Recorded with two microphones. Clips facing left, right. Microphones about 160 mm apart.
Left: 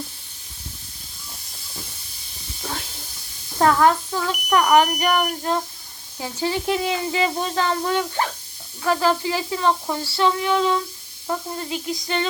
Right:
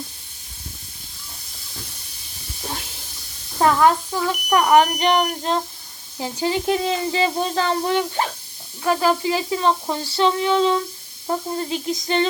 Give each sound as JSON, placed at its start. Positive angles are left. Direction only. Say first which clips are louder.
{"t": 3.6, "sound": "speech", "louder": "even", "side_deg": -15}
{"t": 6.7, "sound": "speech", "louder": "right 2 dB", "side_deg": -35}